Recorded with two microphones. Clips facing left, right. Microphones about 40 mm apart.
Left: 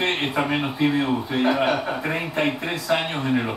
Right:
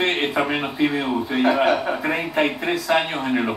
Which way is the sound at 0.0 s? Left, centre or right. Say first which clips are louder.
Right 2 dB; centre.